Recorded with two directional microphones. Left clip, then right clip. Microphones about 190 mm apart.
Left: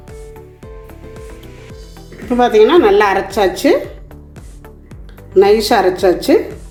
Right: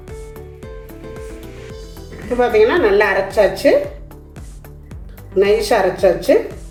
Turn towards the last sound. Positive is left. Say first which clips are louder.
# left 1 dB
turn(degrees=40)  # may be behind; listen again after turning